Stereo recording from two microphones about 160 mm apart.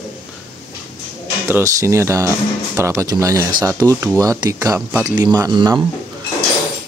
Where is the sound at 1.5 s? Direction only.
20° right (ahead or behind).